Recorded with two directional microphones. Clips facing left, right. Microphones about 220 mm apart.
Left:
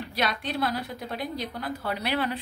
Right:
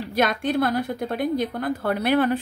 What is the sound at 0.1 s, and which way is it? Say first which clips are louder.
A woman's voice: right 8 dB; 50° right (ahead or behind).